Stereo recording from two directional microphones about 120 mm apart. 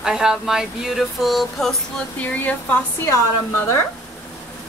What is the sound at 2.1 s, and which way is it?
A woman's voice, 15° left (ahead or behind).